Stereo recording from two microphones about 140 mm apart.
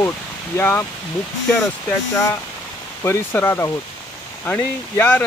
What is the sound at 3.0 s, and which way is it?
Speech, 15° left (ahead or behind).